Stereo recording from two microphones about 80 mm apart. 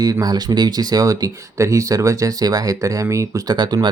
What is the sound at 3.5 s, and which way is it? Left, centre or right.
Speech, right.